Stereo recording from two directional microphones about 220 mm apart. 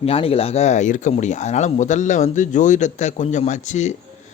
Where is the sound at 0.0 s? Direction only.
25° left (ahead or behind).